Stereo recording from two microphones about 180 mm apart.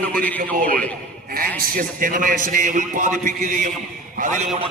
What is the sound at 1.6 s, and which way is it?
A man's voice, 50° right (ahead or behind).